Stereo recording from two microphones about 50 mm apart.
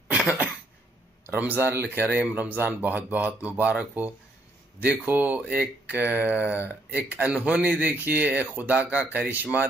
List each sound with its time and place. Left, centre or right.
0.1 s throat clearing: right
1.2 s speech: right
7.3 s speech: right